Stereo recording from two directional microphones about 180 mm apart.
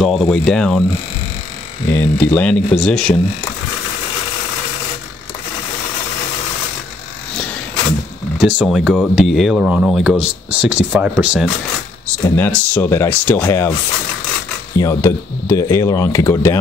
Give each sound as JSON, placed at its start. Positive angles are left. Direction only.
{"t": 0.0, "sound": "speech", "side_deg": 0}
{"t": 1.9, "sound": "speech", "side_deg": 10}
{"t": 8.4, "sound": "speech", "side_deg": -5}
{"t": 12.4, "sound": "speech", "side_deg": 10}
{"t": 14.8, "sound": "speech", "side_deg": 15}